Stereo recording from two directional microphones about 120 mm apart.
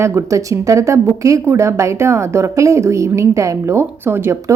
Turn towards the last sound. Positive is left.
turn(degrees=-20)  # may be behind; listen again after turning